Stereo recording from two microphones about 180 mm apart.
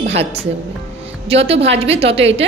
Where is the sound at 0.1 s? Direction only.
35° right (ahead or behind).